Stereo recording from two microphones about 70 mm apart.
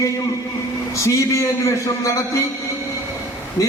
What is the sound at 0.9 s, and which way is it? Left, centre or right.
A man's voice, left.